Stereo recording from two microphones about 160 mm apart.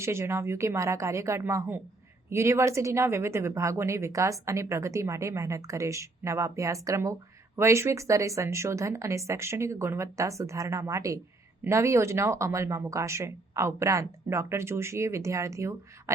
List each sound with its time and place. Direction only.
0.0 s speech: 15° right (ahead or behind)